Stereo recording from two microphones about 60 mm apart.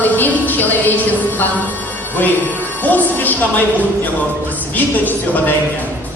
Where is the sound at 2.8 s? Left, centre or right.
Left.